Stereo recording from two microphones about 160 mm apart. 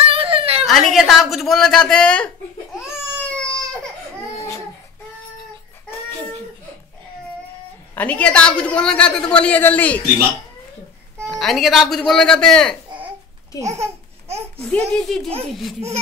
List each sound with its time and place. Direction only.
0.1 s whimper: 35° right (ahead or behind)
0.7 s speech: centre (ahead or behind)
2.9 s baby cry: 5° left (ahead or behind)
7.9 s a woman's voice: 10° left (ahead or behind)
11.2 s speech: 5° left (ahead or behind)
13.6 s a child's voice: 20° right (ahead or behind)
14.7 s speech: 5° left (ahead or behind)